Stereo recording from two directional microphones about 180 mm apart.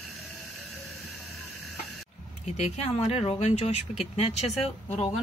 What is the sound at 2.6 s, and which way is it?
Speech, 35° left (ahead or behind).